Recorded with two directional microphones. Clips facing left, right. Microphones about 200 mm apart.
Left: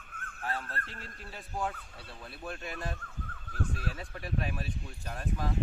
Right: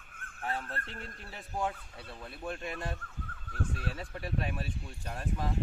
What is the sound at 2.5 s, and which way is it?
Speech, 25° right (ahead or behind).